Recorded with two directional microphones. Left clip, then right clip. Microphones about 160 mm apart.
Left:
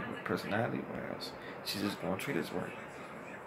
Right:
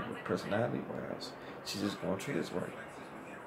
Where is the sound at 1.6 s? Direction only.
15° right (ahead or behind).